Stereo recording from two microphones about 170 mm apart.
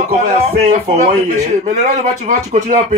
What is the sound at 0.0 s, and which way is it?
A man's voice, 40° right (ahead or behind).